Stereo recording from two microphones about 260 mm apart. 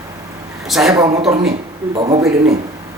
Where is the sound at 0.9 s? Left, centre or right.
Centre.